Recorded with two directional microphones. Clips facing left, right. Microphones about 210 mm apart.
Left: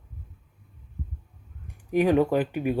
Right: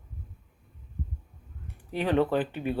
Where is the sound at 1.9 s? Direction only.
10° left (ahead or behind).